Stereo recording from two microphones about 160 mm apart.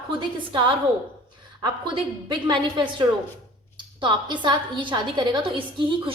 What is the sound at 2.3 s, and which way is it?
A woman's voice, 30° right (ahead or behind).